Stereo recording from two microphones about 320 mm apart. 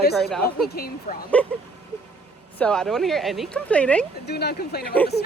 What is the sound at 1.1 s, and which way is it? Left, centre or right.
Speech, left.